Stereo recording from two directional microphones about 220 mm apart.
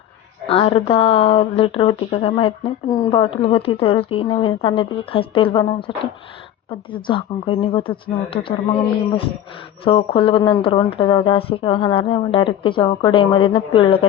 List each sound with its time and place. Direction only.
0.4 s speech: 25° left (ahead or behind)
6.7 s speech: 20° left (ahead or behind)
9.8 s speech: 25° left (ahead or behind)